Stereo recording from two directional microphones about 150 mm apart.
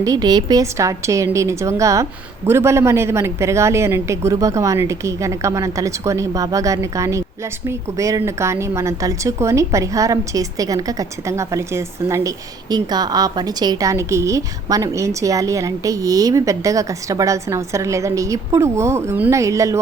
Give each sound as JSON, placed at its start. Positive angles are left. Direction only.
{"t": 0.0, "sound": "a woman's voice", "side_deg": -25}